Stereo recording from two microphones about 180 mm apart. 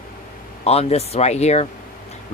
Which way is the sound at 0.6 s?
35° left (ahead or behind).